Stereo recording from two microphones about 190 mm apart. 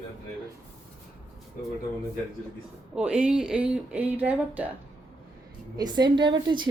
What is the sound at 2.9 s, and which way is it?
Speech, 5° right (ahead or behind).